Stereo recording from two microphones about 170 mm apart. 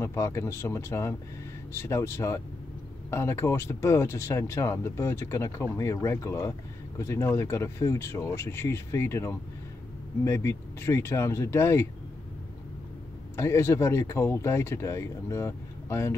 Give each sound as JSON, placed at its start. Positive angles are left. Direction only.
{"t": 0.0, "sound": "speech", "side_deg": 15}
{"t": 13.4, "sound": "speech", "side_deg": 15}